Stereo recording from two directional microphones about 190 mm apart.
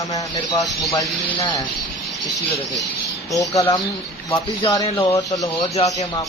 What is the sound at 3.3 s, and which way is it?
A man's voice, 15° left (ahead or behind).